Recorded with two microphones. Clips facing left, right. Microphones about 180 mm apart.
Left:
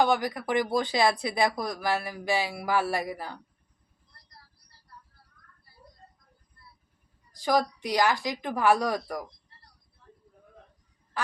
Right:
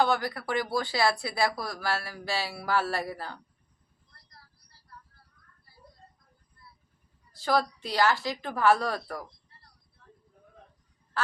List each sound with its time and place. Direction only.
0.0 s speech: 15° left (ahead or behind)
7.3 s speech: 15° left (ahead or behind)